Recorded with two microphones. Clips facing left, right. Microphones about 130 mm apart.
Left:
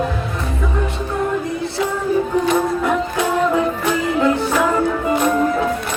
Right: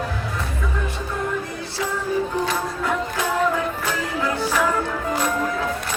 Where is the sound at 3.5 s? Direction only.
25° left (ahead or behind).